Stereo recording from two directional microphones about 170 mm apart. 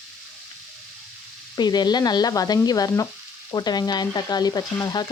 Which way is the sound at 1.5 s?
25° left (ahead or behind).